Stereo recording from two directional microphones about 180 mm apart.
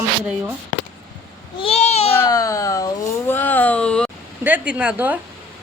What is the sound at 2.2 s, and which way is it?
Speech, 20° left (ahead or behind).